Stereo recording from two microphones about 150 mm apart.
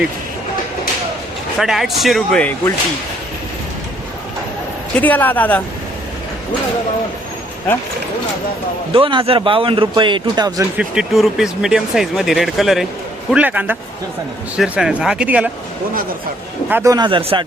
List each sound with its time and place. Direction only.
1.5 s speech: centre (ahead or behind)
4.9 s speech: 10° left (ahead or behind)
8.9 s a man's voice: 35° right (ahead or behind)
10.6 s a man's voice: 5° right (ahead or behind)
16.6 s a man's voice: 15° right (ahead or behind)
17.1 s a man's voice: 35° right (ahead or behind)